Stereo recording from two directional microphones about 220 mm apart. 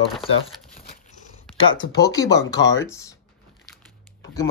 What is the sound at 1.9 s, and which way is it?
Speech, 15° left (ahead or behind).